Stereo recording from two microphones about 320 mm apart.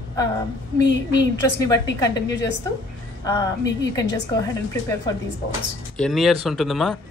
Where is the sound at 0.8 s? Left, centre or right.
Left.